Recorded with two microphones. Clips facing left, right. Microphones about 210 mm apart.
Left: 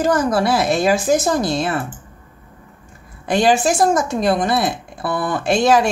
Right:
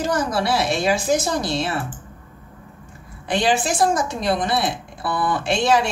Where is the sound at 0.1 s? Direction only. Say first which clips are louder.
Left 4 dB; 50° left (ahead or behind).